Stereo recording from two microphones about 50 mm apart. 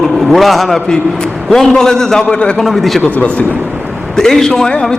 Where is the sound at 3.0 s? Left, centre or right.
Left.